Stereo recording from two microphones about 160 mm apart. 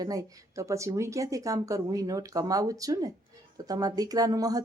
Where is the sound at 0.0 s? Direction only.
20° right (ahead or behind).